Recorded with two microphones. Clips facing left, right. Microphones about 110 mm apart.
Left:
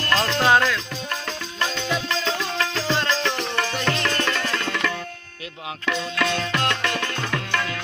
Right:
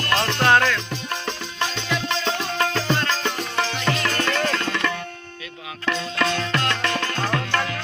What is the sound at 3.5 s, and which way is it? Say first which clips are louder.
Music: even; 10° right (ahead or behind).